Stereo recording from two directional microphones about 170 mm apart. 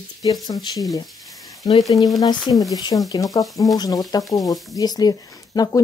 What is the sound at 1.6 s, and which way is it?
Speech, 20° left (ahead or behind).